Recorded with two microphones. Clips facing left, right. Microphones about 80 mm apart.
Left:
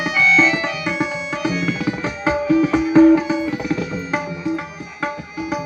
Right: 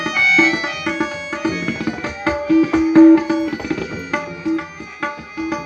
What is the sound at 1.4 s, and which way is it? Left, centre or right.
Tabla, right.